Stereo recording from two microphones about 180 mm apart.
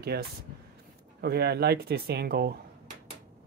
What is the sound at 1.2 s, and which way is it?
Speech, 65° right (ahead or behind).